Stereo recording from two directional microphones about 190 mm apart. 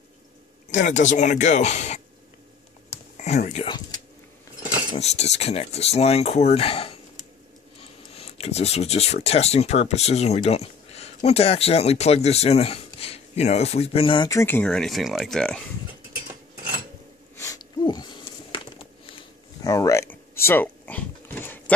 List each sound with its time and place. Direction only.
0.7 s speech: 40° left (ahead or behind)
3.2 s speech: 40° left (ahead or behind)
3.6 s speech: 20° left (ahead or behind)
4.9 s speech: 35° left (ahead or behind); by 15.6 s 5° left (ahead or behind)
17.4 s a sound: 20° left (ahead or behind)